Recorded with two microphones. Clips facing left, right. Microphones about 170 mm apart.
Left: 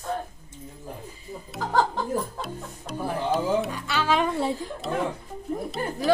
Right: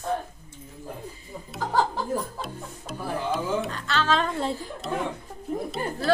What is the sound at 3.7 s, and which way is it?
Speech, 10° left (ahead or behind).